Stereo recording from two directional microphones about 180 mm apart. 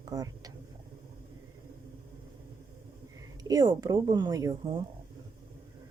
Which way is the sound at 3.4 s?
20° right (ahead or behind).